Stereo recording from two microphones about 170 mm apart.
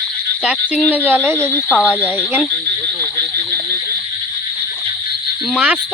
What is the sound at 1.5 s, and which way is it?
Speech, 15° left (ahead or behind).